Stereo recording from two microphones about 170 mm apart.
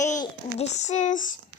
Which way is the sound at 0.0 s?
15° left (ahead or behind).